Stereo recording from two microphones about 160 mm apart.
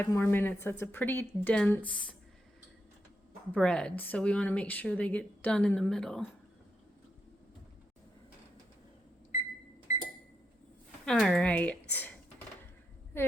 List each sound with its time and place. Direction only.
0.0 s speech: 15° left (ahead or behind)
3.5 s speech: 5° left (ahead or behind)
11.0 s speech: centre (ahead or behind)
13.1 s a sound: 15° left (ahead or behind)